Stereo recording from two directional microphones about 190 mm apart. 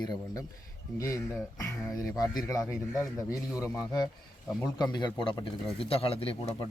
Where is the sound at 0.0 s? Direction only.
20° left (ahead or behind).